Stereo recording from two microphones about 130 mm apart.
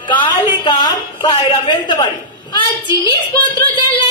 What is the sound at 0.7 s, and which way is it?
A woman's voice, 35° left (ahead or behind).